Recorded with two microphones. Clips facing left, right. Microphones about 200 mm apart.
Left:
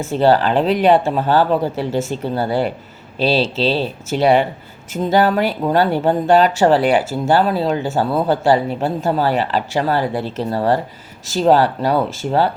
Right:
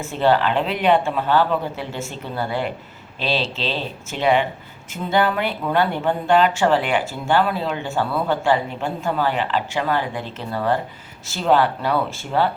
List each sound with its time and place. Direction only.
0.1 s speech: 35° left (ahead or behind)